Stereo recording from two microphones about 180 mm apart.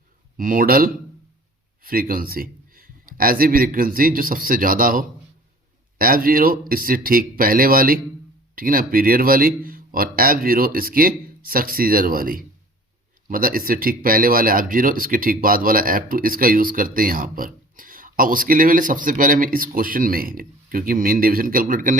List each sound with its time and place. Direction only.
0.3 s speech: 50° right (ahead or behind)